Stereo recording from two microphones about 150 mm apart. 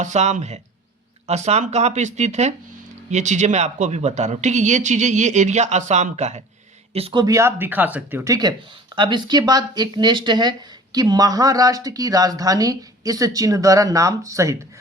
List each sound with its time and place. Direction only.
0.0 s speech: 50° right (ahead or behind)
6.9 s speech: 35° right (ahead or behind); by 14.7 s 20° right (ahead or behind)